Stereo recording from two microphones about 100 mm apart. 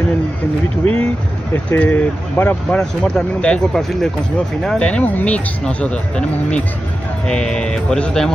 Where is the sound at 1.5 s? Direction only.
20° left (ahead or behind).